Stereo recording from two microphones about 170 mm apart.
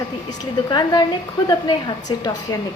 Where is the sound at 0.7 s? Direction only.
25° left (ahead or behind).